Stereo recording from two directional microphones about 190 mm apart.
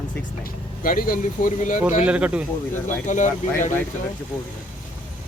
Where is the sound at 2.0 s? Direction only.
5° right (ahead or behind).